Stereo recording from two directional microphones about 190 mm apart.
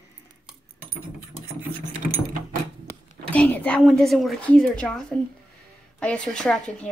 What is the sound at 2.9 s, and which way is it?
Speech, 10° left (ahead or behind).